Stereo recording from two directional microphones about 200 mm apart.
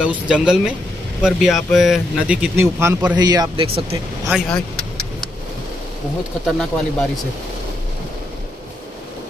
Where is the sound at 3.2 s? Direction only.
20° right (ahead or behind).